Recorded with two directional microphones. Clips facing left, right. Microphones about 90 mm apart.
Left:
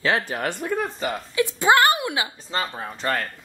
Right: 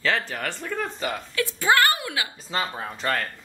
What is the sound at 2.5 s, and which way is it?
Speech, centre (ahead or behind).